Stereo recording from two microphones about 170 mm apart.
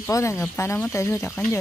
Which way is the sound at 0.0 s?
15° left (ahead or behind).